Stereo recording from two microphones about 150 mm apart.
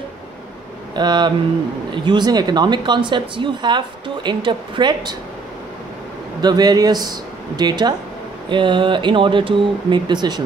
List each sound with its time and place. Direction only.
0.9 s speech: 30° right (ahead or behind)
6.4 s speech: 25° right (ahead or behind)